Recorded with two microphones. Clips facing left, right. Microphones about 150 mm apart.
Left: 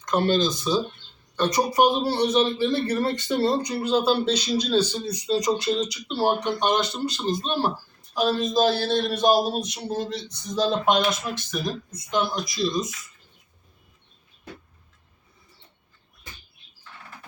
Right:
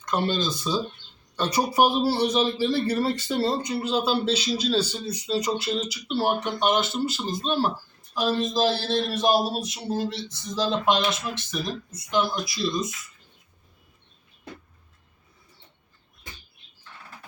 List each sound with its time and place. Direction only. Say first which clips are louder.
0.0 s speech: left 4 dB; centre (ahead or behind)
1.5 s speech: left 1 dB; 10° right (ahead or behind)